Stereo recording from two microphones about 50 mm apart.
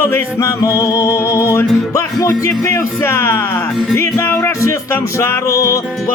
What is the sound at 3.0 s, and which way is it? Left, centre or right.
Speech, left.